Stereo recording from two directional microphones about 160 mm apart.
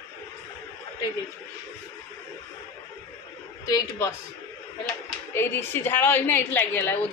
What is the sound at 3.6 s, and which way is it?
Speech, 20° left (ahead or behind).